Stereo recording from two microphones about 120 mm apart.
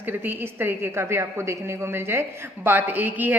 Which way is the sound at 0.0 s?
15° right (ahead or behind).